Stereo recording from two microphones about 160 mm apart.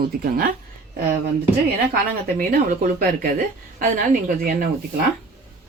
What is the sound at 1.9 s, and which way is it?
Speech, 65° right (ahead or behind).